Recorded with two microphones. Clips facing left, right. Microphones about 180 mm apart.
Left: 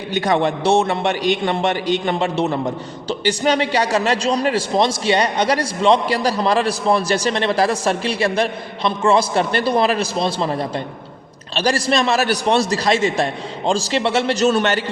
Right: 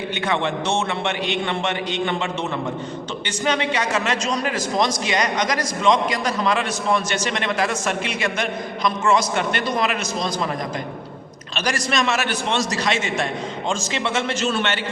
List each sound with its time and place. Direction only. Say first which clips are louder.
0.1 s a man's voice: left 7 dB; 40° left (ahead or behind)